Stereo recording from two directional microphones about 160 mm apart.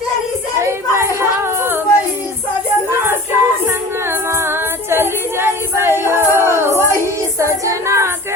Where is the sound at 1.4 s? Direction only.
15° right (ahead or behind).